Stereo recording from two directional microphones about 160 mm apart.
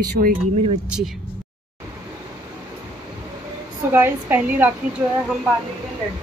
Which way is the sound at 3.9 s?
10° right (ahead or behind).